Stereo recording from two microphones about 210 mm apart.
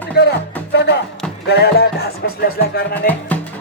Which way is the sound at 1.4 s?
50° left (ahead or behind).